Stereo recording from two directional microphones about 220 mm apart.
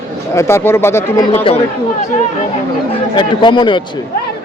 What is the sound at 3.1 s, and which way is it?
Speech, 20° left (ahead or behind).